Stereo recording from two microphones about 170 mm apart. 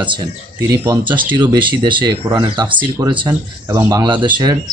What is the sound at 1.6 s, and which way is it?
Speech, 30° right (ahead or behind).